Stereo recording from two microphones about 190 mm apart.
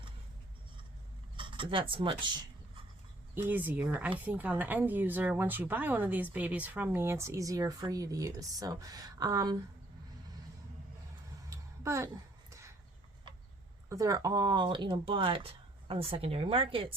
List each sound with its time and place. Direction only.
1.4 s speech: 25° right (ahead or behind)
3.3 s speech: 10° right (ahead or behind)
11.4 s a sound: 15° right (ahead or behind)
13.9 s speech: 15° right (ahead or behind)